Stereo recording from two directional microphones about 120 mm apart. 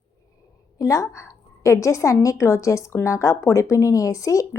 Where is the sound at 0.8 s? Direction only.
25° left (ahead or behind).